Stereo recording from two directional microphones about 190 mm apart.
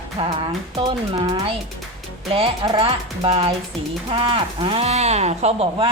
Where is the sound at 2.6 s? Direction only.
25° right (ahead or behind).